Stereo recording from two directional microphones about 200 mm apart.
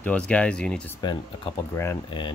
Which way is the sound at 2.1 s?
25° left (ahead or behind).